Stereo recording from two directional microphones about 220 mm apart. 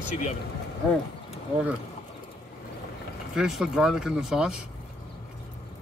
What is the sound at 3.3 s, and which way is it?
Speech, 5° right (ahead or behind).